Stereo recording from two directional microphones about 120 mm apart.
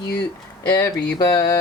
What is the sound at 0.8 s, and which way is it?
Speech, 35° left (ahead or behind).